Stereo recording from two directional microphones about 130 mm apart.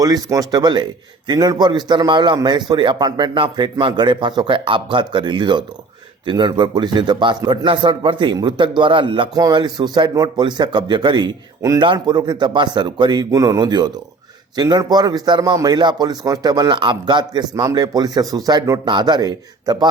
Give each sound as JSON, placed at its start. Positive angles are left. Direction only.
{"t": 0.0, "sound": "a man's voice", "side_deg": -30}